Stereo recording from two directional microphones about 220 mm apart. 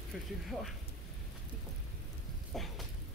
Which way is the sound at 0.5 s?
Centre (ahead or behind).